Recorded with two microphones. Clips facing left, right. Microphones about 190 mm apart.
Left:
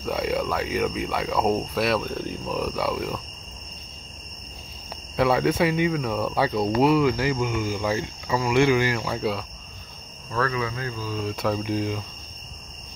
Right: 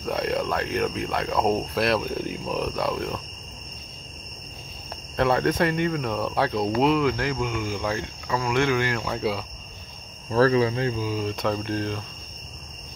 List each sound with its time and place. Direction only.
0.0 s speech: centre (ahead or behind)
5.1 s speech: 5° left (ahead or behind)
10.3 s speech: 30° right (ahead or behind)
11.1 s speech: centre (ahead or behind)